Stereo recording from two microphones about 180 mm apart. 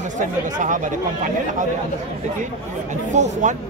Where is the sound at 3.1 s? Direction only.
40° right (ahead or behind).